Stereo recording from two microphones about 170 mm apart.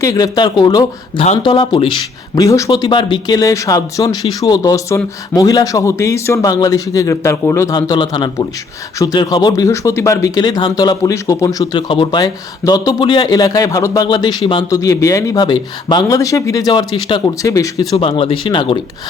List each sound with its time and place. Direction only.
0.0 s speech: 20° left (ahead or behind)
17.9 s speech: 35° left (ahead or behind)